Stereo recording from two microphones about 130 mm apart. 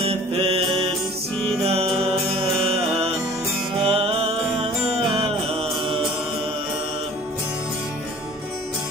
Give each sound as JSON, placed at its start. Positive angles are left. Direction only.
{"t": 0.0, "sound": "music", "side_deg": -50}
{"t": 3.8, "sound": "music", "side_deg": -50}